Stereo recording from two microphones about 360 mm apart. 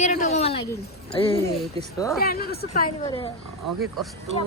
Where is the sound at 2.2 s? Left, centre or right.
Left.